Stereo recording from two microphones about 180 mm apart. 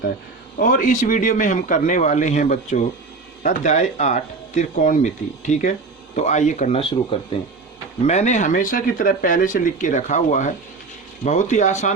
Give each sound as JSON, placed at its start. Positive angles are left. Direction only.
{"t": 0.6, "sound": "speech", "side_deg": 50}